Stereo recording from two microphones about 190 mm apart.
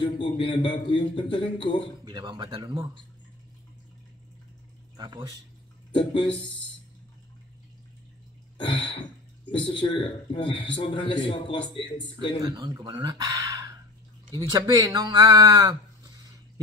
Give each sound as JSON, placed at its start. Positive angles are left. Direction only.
{"t": 0.0, "sound": "a man's voice", "side_deg": 25}
{"t": 2.0, "sound": "speech", "side_deg": -25}
{"t": 4.9, "sound": "speech", "side_deg": -20}
{"t": 5.9, "sound": "a man's voice", "side_deg": 25}
{"t": 8.5, "sound": "throat clearing", "side_deg": 25}
{"t": 9.7, "sound": "a man's voice", "side_deg": 25}
{"t": 12.4, "sound": "speech", "side_deg": -20}